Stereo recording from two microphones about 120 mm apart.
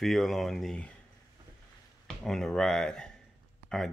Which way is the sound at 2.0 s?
5° left (ahead or behind).